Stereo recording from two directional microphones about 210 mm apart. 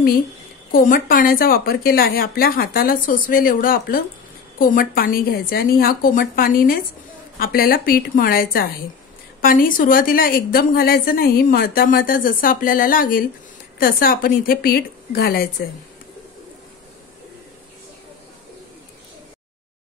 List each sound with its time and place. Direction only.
0.7 s a woman's voice: 40° left (ahead or behind)